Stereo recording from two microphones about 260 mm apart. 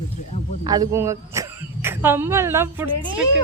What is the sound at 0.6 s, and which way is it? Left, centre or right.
Speech, centre.